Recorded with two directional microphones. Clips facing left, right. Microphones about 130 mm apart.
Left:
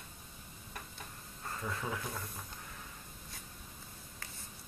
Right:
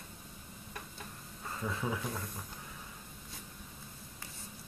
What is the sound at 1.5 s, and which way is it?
Speech, 5° right (ahead or behind).